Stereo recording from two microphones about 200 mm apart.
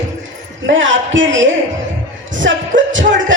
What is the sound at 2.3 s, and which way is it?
Music, 70° right (ahead or behind).